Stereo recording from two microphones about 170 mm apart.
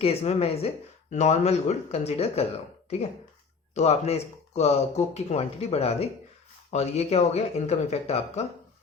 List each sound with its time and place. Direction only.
0.0 s speech: 35° left (ahead or behind)
3.8 s speech: 40° left (ahead or behind)